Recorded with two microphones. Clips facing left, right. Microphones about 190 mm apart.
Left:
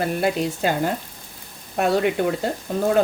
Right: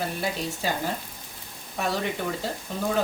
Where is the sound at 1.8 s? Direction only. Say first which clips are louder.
Left 8 dB; 65° left (ahead or behind).